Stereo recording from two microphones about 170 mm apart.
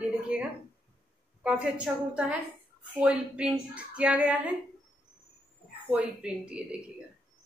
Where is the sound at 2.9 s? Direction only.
5° right (ahead or behind).